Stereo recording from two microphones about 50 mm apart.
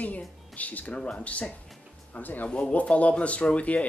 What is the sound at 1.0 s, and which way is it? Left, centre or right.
Speech, centre.